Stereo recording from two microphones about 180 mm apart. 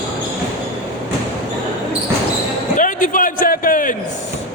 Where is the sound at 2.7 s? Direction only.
45° left (ahead or behind).